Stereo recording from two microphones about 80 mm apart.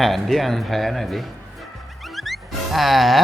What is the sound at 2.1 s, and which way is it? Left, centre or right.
Music, centre.